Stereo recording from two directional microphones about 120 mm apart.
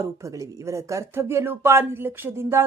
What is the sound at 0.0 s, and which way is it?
Speech, 25° right (ahead or behind).